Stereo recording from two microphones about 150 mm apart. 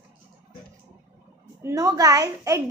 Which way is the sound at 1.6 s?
20° right (ahead or behind).